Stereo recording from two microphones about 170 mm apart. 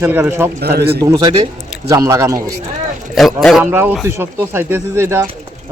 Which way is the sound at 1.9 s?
20° right (ahead or behind).